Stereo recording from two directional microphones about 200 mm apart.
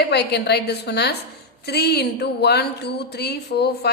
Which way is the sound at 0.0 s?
55° left (ahead or behind).